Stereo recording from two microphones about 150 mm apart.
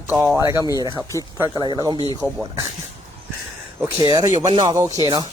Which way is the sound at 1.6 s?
30° right (ahead or behind).